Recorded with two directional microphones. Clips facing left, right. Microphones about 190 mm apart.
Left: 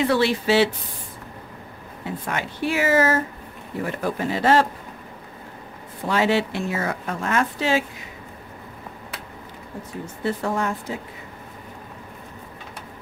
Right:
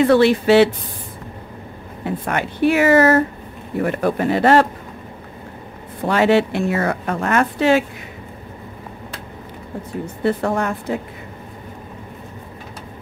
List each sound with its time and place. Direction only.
0.0 s speech: 55° right (ahead or behind)
2.0 s speech: 60° right (ahead or behind)
6.0 s speech: 60° right (ahead or behind)
10.2 s speech: 60° right (ahead or behind)